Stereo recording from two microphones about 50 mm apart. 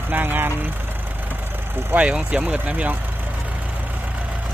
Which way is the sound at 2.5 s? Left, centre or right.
Right.